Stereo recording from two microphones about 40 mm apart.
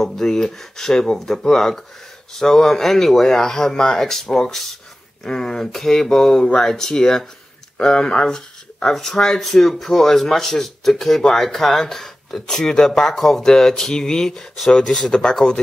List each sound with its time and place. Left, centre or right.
0.0 s speech: centre
15.0 s speech: centre